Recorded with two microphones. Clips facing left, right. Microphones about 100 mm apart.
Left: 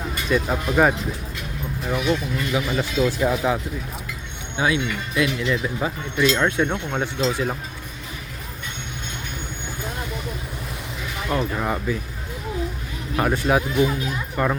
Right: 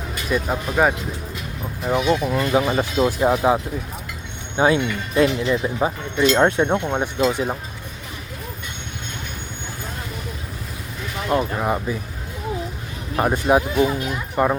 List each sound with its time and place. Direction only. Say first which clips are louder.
0.3 s speech: left 1 dB; 10° right (ahead or behind)
1.9 s speech: right 4 dB; 20° right (ahead or behind)
2.2 s speech: right 6 dB; 35° right (ahead or behind); by 7.5 s 20° right (ahead or behind)
11.3 s speech: right 2 dB; 15° right (ahead or behind)
13.1 s speech: right 3 dB; 20° right (ahead or behind)